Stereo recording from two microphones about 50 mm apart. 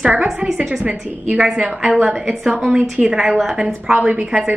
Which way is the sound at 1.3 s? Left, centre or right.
Centre.